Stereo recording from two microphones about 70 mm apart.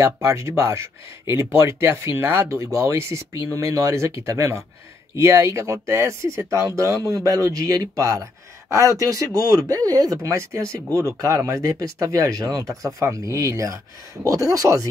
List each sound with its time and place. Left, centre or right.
0.0 s speech: right
10.2 s speech: right